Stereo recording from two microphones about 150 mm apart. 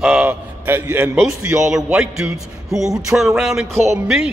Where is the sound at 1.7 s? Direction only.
5° right (ahead or behind).